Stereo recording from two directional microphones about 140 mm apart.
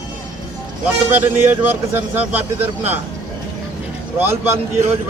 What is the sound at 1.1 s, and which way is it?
A man's voice, 10° right (ahead or behind).